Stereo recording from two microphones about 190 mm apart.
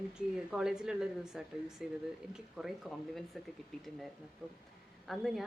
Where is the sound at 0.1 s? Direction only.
5° right (ahead or behind).